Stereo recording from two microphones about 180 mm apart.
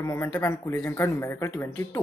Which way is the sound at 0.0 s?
15° left (ahead or behind).